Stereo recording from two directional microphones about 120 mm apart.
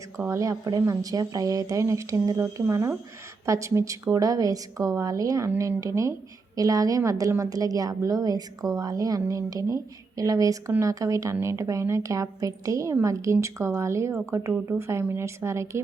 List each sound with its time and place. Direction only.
0.2 s a woman's voice: 25° right (ahead or behind)